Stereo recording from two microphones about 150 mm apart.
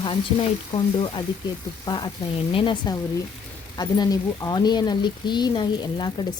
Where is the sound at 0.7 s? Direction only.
30° left (ahead or behind).